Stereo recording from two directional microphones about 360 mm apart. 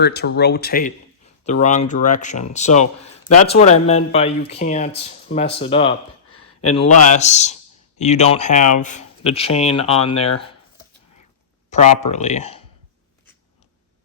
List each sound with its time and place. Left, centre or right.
0.0 s speech: left
6.3 s a sound: left
7.0 s speech: centre
11.7 s speech: centre